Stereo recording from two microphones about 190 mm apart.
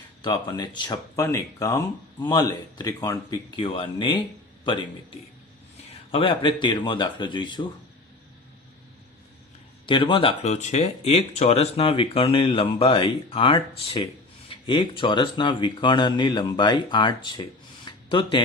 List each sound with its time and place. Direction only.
0.2 s a man's voice: 20° left (ahead or behind)
6.1 s speech: 30° left (ahead or behind)
9.8 s speech: 25° left (ahead or behind)
17.8 s a sound: 25° left (ahead or behind)